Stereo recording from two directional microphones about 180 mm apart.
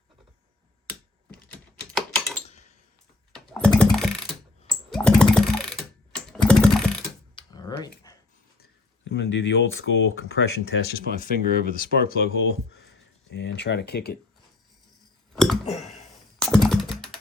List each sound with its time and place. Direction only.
2.0 s a sound: 5° left (ahead or behind)
3.8 s typing: centre (ahead or behind)
4.7 s a sound: 5° left (ahead or behind)
6.1 s computer keyboard: 5° left (ahead or behind)
7.3 s computer keyboard: 20° left (ahead or behind)
8.6 s speech: 75° left (ahead or behind); by 12.3 s 60° left (ahead or behind)
13.3 s speech: 75° left (ahead or behind)
16.4 s computer keyboard: centre (ahead or behind)